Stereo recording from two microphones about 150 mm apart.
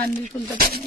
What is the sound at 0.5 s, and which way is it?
Speech, 90° right.